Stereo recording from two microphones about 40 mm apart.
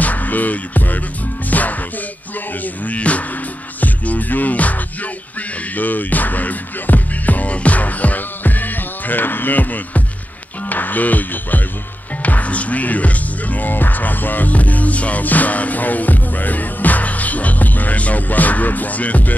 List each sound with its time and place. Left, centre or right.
0.0 s music: left
2.6 s speech: left
3.8 s music: left